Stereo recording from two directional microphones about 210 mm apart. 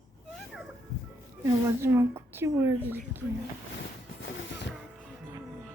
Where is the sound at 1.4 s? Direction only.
10° right (ahead or behind).